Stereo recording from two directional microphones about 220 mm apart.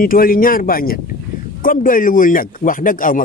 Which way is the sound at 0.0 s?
40° left (ahead or behind).